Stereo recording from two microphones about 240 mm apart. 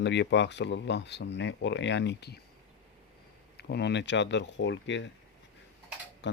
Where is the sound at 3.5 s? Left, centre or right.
Left.